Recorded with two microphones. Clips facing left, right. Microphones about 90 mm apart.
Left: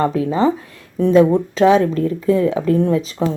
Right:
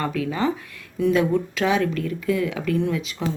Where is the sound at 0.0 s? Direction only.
30° left (ahead or behind).